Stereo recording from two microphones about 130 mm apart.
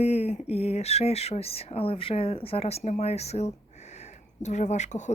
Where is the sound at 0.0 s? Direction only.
55° left (ahead or behind).